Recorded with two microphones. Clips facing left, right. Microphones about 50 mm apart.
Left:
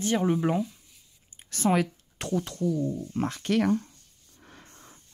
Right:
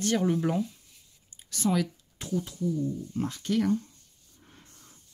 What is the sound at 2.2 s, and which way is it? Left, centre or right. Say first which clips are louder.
Speech: left 3 dB; left.